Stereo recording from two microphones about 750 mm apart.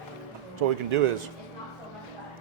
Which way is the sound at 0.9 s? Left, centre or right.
Right.